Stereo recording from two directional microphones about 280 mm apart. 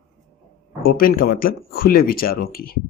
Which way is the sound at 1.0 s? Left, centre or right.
Left.